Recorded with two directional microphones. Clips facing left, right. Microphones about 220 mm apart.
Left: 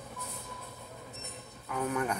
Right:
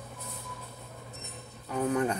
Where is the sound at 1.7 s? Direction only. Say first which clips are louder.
Right 4 dB; 30° right (ahead or behind).